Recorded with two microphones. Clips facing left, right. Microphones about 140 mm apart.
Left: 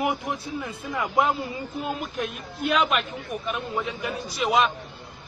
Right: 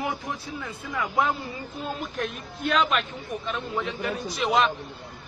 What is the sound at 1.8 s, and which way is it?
A man's voice, 10° left (ahead or behind).